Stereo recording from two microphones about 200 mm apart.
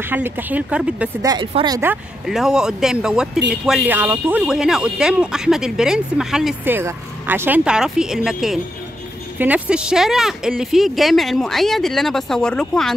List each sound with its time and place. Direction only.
0.0 s a woman's voice: 10° right (ahead or behind)
1.2 s speech: 20° right (ahead or behind)
1.8 s speech: 5° right (ahead or behind)